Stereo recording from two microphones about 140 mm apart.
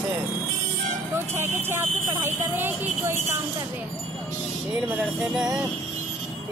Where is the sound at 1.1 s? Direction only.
15° right (ahead or behind).